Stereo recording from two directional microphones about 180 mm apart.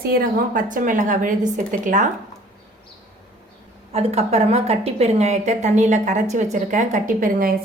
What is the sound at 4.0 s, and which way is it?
A woman's voice, 35° right (ahead or behind).